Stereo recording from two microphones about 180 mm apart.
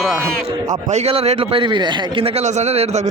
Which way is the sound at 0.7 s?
40° right (ahead or behind).